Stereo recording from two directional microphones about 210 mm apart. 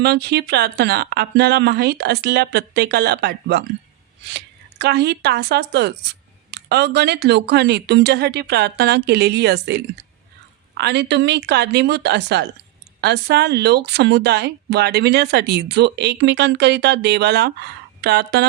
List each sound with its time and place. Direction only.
0.0 s speech: 50° right (ahead or behind)